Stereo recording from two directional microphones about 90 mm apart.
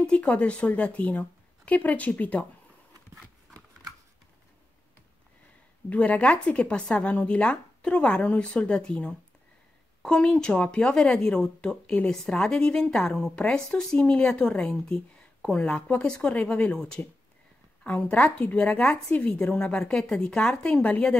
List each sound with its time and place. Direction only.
0.0 s speech: 10° left (ahead or behind)
5.9 s speech: 15° left (ahead or behind)